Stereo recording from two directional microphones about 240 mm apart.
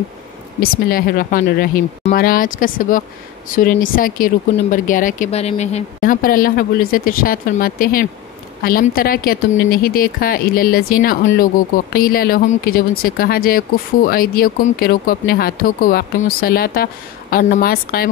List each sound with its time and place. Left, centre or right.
0.6 s speech: left